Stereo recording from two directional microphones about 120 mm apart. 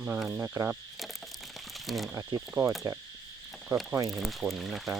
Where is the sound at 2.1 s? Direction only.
25° right (ahead or behind).